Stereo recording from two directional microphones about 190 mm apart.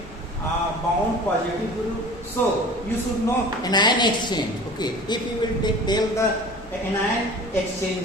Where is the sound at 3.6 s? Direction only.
20° left (ahead or behind).